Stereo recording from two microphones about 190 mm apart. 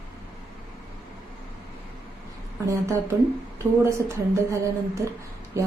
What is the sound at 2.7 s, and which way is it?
A woman's voice, 15° right (ahead or behind).